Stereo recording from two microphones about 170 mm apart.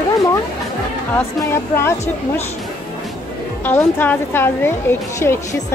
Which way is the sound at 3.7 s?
10° left (ahead or behind).